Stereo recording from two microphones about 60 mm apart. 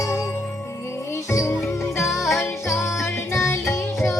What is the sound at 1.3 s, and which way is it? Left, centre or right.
Music, left.